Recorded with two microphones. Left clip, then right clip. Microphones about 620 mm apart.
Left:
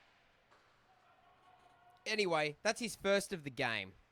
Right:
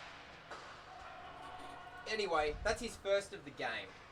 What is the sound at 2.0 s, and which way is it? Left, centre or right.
Speech, left.